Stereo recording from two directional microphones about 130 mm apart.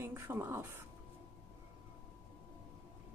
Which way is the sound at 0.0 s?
20° right (ahead or behind).